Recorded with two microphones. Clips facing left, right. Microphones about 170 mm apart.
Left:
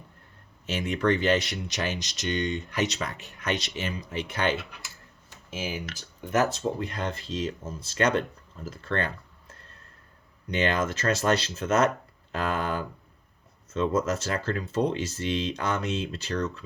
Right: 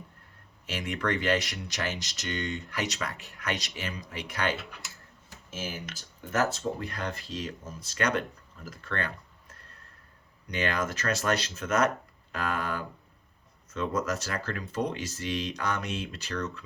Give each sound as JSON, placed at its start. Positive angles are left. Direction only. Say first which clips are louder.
{"t": 0.7, "sound": "speech", "louder": "left 5 dB", "side_deg": 25}
{"t": 5.5, "sound": "speech", "louder": "left 4 dB", "side_deg": 15}